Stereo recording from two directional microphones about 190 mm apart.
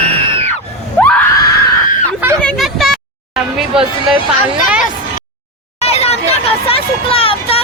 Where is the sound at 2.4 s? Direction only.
5° left (ahead or behind).